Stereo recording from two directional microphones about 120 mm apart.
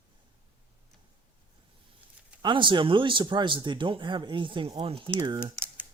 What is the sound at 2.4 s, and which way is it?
Speech, 40° right (ahead or behind).